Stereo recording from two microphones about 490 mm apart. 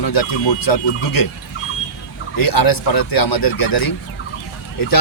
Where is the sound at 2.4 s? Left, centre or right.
Left.